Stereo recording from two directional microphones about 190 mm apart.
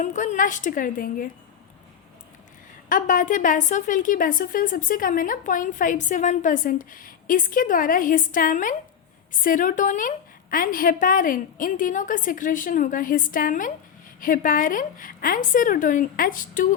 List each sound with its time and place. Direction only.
0.0 s a woman's voice: 40° left (ahead or behind)
2.9 s a woman's voice: 45° left (ahead or behind)